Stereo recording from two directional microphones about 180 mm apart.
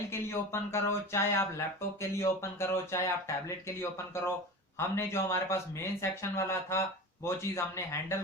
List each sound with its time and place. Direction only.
0.1 s speech: 15° left (ahead or behind)